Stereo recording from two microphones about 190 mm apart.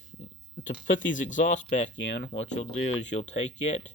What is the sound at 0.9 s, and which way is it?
Speech, 40° left (ahead or behind).